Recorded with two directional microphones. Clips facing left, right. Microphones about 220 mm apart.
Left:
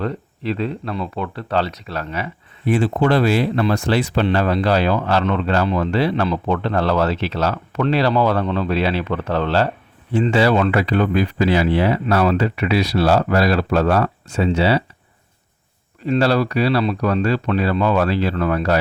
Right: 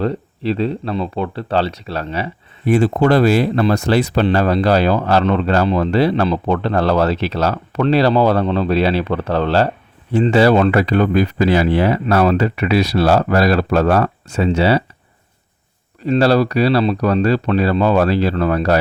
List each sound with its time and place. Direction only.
0.0 s speech: 30° right (ahead or behind)
2.6 s speech: 45° right (ahead or behind)
16.0 s speech: 35° right (ahead or behind)